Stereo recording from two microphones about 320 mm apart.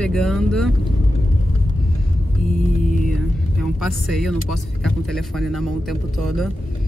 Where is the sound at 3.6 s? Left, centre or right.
Centre.